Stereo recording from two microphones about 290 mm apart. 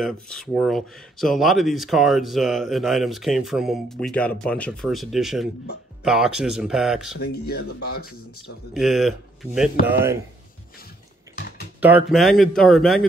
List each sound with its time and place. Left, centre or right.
0.0 s speech: centre
7.2 s speech: left
8.7 s speech: centre
11.8 s speech: centre